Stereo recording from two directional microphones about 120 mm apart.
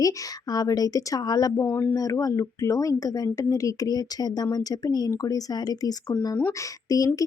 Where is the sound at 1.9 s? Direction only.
30° left (ahead or behind).